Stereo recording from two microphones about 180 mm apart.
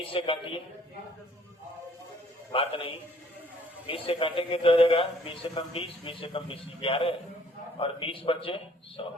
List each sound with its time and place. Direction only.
0.1 s a man's voice: 30° left (ahead or behind)
2.5 s a man's voice: 30° left (ahead or behind)